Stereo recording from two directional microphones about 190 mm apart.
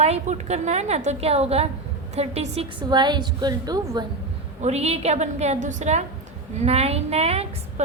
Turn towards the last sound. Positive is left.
turn(degrees=-35)  # may be behind; listen again after turning